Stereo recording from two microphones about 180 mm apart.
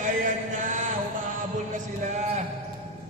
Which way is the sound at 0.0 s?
45° right (ahead or behind).